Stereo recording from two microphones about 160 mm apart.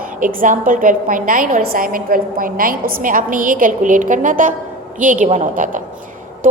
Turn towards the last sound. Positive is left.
turn(degrees=-55)  # may be behind; listen again after turning